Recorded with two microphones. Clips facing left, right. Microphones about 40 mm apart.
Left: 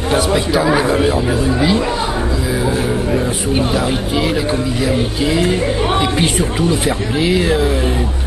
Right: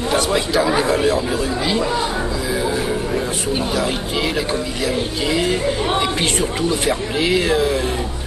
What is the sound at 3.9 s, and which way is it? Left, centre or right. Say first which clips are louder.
Speech: left 4 dB; centre.